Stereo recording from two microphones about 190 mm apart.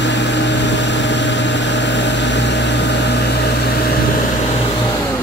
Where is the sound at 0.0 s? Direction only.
70° left (ahead or behind).